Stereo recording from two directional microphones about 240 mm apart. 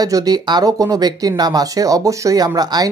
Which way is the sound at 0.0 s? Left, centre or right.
Centre.